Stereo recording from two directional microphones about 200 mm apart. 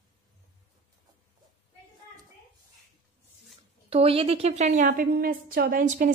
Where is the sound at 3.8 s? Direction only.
30° right (ahead or behind).